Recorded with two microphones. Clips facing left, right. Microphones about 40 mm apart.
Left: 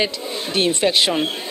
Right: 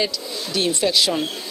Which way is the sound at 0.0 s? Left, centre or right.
Left.